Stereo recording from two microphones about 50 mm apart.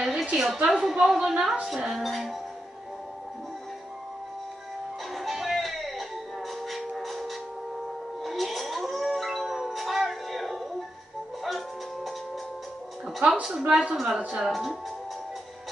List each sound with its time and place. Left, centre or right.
0.0 s a sound: centre
0.7 s a woman's voice: centre
5.1 s music: centre
7.0 s a sound: centre
8.2 s howl: centre
11.4 s music: centre
13.7 s a woman's voice: centre
14.5 s speech: centre